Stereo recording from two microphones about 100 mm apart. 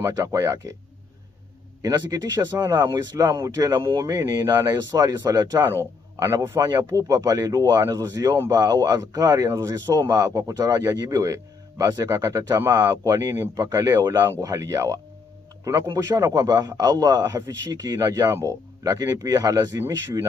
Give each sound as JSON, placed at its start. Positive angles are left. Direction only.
{"t": 0.0, "sound": "speech", "side_deg": -35}
{"t": 1.8, "sound": "speech", "side_deg": -40}
{"t": 2.8, "sound": "speech", "side_deg": -25}
{"t": 6.2, "sound": "speech", "side_deg": -25}
{"t": 13.7, "sound": "speech", "side_deg": -40}